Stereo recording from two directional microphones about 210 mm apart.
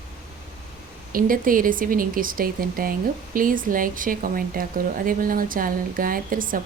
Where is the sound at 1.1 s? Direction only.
40° right (ahead or behind).